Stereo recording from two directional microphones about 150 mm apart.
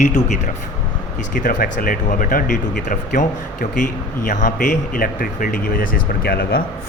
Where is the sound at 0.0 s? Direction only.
50° left (ahead or behind).